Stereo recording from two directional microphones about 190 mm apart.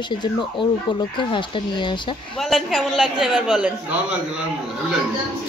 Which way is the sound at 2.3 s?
Centre (ahead or behind).